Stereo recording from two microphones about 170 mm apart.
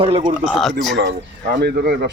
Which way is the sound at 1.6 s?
70° right (ahead or behind).